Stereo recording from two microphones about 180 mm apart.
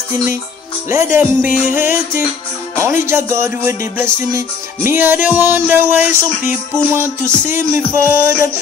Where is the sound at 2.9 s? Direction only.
15° right (ahead or behind).